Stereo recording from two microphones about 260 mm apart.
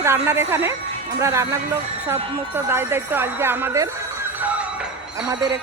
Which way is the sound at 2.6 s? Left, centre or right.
Centre.